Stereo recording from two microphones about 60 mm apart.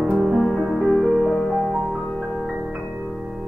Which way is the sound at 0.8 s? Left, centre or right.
Centre.